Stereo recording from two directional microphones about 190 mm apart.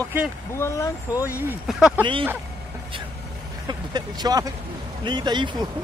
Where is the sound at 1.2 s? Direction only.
10° right (ahead or behind).